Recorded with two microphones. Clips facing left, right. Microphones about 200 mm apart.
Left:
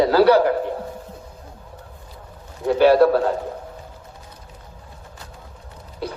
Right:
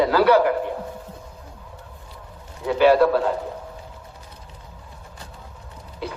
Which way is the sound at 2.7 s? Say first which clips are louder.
Left 2 dB; 40° left (ahead or behind).